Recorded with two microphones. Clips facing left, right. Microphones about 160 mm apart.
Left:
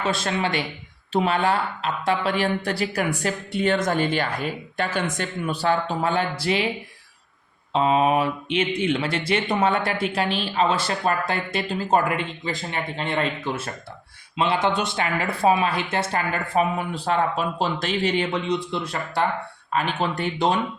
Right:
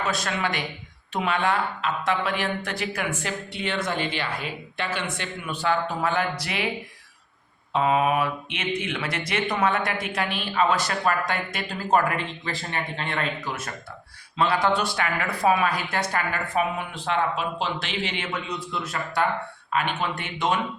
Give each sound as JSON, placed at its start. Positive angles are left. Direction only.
{"t": 0.1, "sound": "speech", "side_deg": 25}
{"t": 7.7, "sound": "speech", "side_deg": 30}